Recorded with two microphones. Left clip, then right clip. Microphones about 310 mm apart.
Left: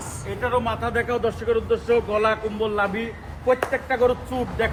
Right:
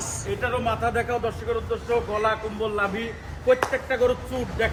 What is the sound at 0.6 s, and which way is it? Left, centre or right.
A man's voice, centre.